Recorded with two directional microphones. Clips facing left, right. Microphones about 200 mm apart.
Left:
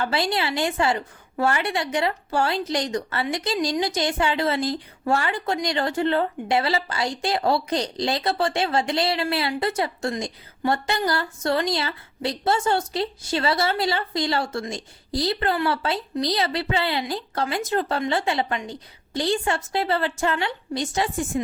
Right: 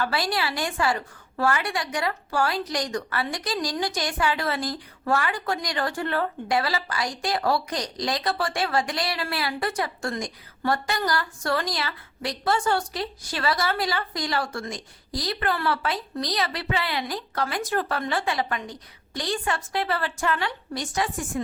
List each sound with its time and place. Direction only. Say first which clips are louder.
0.0 s a woman's voice: left 2 dB; 25° left (ahead or behind)